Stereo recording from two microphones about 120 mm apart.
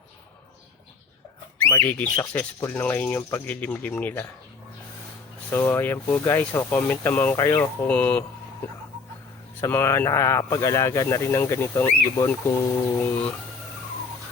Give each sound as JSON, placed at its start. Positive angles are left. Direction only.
{"t": 1.8, "sound": "speech", "side_deg": 15}
{"t": 5.5, "sound": "speech", "side_deg": 20}
{"t": 7.3, "sound": "speech", "side_deg": 25}
{"t": 7.8, "sound": "speech", "side_deg": 10}
{"t": 9.6, "sound": "speech", "side_deg": 20}